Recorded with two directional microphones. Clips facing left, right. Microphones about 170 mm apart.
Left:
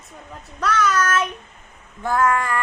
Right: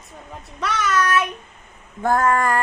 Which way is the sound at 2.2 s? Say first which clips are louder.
Left 1 dB; 40° right (ahead or behind).